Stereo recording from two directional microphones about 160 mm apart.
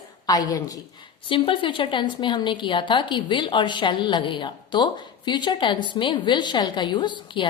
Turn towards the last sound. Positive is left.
turn(degrees=30)  # may be behind; listen again after turning